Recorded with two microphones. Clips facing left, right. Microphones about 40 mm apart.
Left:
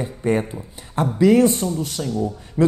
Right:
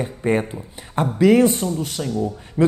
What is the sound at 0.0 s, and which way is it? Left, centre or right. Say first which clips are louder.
Speech: right 1 dB; right.